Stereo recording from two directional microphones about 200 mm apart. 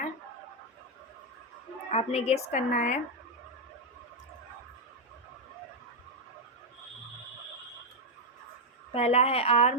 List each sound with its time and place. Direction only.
1.9 s a woman's voice: 30° left (ahead or behind)
8.9 s a woman's voice: 30° left (ahead or behind)